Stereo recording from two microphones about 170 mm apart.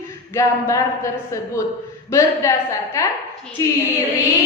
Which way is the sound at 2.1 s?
20° left (ahead or behind).